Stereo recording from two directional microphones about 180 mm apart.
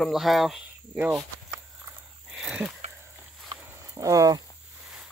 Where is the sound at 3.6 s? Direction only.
15° right (ahead or behind).